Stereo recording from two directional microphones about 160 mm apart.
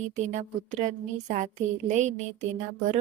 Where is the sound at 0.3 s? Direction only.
50° right (ahead or behind).